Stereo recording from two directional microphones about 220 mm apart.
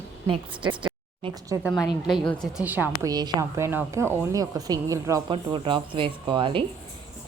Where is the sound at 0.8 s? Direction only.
20° right (ahead or behind).